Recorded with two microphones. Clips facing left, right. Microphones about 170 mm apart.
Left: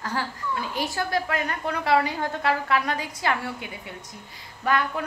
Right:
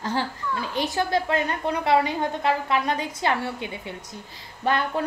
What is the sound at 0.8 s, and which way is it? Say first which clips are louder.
A woman's voice: right 4 dB; 25° right (ahead or behind).